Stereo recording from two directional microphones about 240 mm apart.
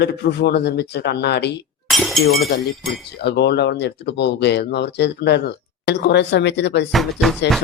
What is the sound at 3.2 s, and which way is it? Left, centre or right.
Speech, left.